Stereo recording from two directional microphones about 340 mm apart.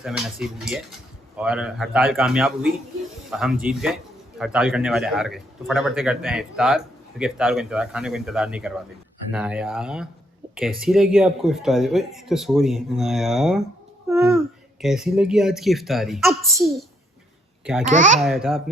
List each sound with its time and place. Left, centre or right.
0.0 s a man's voice: centre
17.8 s a child's voice: right
18.2 s a man's voice: centre